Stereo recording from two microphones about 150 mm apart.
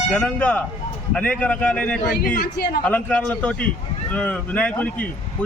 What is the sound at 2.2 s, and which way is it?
Speech, 75° left (ahead or behind).